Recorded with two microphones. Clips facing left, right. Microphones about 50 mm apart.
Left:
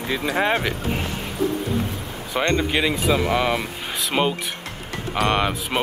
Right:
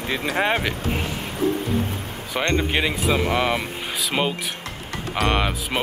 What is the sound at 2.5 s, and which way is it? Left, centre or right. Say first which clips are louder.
Speech: left 1 dB; centre.